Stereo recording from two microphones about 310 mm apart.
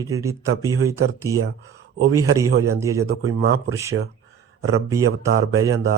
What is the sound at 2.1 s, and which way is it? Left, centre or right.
Speech, centre.